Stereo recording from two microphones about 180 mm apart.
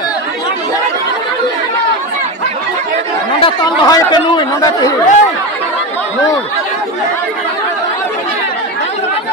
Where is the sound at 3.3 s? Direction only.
25° left (ahead or behind).